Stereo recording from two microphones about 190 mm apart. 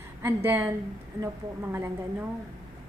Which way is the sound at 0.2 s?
10° right (ahead or behind).